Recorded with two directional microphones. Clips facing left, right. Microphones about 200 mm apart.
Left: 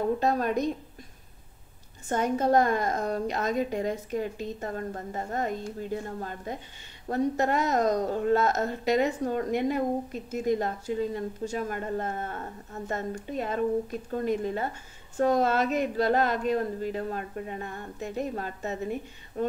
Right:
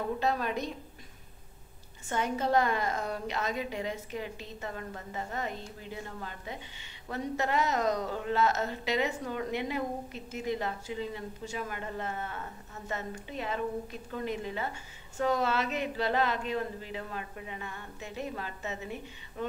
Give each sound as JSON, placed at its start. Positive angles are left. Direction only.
{"t": 0.2, "sound": "a woman's voice", "side_deg": 45}
{"t": 2.0, "sound": "a woman's voice", "side_deg": 45}